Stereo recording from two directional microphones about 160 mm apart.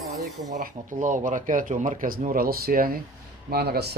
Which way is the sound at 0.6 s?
55° right (ahead or behind).